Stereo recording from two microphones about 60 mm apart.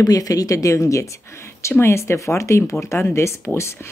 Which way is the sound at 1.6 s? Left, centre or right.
Left.